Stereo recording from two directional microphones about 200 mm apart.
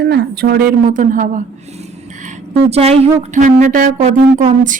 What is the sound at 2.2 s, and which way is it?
A woman's voice, 30° right (ahead or behind).